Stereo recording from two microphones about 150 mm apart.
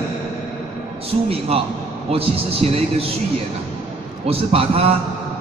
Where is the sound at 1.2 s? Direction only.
40° right (ahead or behind).